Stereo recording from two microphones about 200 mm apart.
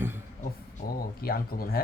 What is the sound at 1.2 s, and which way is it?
Speech, 50° left (ahead or behind).